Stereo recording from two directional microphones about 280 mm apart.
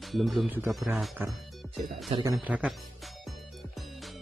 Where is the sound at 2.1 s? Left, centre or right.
Centre.